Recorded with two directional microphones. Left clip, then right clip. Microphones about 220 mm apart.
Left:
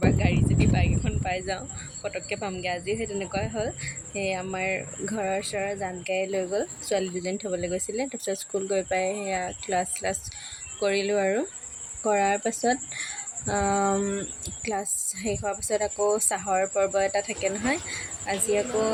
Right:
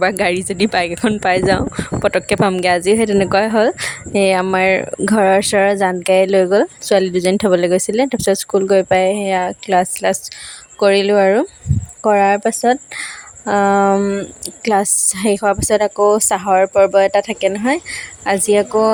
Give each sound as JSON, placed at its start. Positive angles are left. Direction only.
{"t": 0.0, "sound": "speech", "side_deg": -50}